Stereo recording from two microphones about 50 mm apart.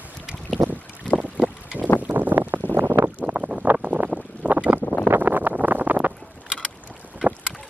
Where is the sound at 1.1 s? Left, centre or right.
Centre.